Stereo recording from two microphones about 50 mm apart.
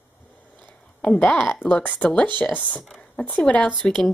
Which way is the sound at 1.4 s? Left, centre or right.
Centre.